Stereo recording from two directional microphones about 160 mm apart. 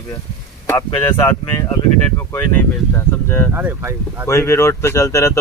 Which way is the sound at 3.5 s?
10° right (ahead or behind).